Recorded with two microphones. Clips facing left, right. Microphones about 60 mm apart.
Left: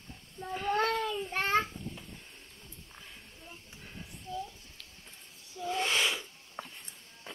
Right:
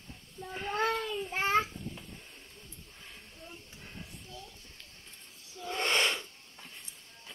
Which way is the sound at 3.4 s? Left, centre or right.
Centre.